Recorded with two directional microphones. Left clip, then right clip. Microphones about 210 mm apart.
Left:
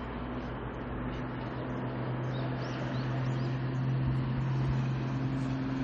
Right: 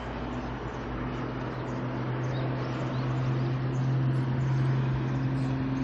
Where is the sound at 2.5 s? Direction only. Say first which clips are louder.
Right 3 dB; 50° left (ahead or behind).